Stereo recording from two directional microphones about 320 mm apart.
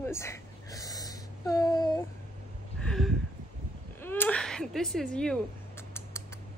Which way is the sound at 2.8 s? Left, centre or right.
Centre.